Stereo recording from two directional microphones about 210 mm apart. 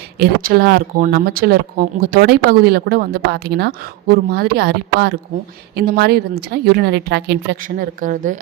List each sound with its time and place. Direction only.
0.2 s speech: 50° right (ahead or behind)